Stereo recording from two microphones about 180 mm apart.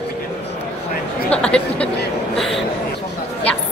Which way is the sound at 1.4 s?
5° left (ahead or behind).